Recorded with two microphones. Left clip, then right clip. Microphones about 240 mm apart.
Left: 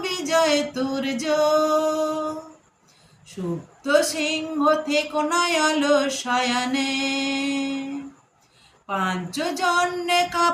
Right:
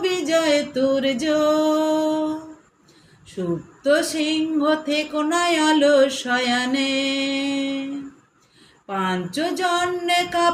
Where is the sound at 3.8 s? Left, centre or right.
Centre.